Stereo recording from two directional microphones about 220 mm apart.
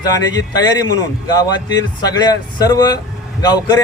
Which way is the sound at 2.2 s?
15° left (ahead or behind).